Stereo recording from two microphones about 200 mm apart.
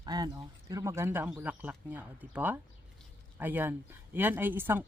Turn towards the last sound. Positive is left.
turn(degrees=-10)  # may be behind; listen again after turning